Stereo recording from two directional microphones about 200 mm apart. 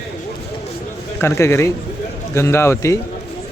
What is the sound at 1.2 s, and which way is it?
A man's voice, 15° left (ahead or behind).